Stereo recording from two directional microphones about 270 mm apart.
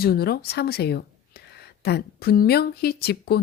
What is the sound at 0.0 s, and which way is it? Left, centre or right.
Speech, left.